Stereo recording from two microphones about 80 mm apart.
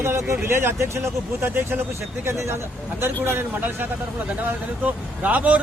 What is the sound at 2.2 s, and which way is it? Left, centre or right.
A man's voice, right.